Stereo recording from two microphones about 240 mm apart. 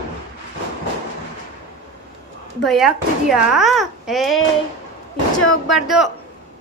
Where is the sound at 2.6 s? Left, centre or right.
Centre.